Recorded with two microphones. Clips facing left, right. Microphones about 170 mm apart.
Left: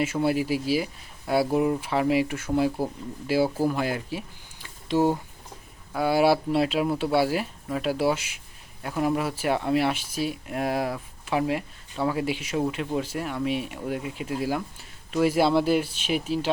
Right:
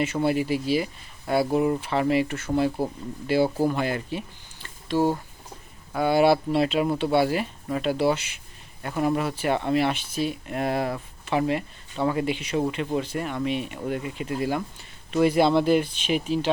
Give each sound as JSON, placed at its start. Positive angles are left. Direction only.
{"t": 0.0, "sound": "speech", "side_deg": 5}
{"t": 4.6, "sound": "a sound", "side_deg": 15}
{"t": 5.9, "sound": "speech", "side_deg": 5}